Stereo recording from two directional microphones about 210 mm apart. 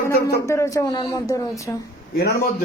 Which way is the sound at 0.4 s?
15° left (ahead or behind).